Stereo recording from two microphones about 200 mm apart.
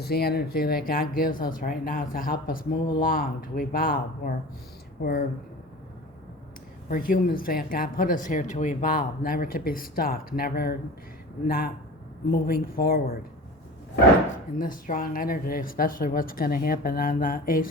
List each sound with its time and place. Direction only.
0.0 s speech: 50° left (ahead or behind)
6.8 s speech: 45° left (ahead or behind)
14.6 s speech: 45° left (ahead or behind)